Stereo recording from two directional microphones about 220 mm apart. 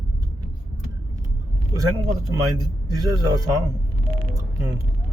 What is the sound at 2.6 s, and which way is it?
Speech, 15° right (ahead or behind).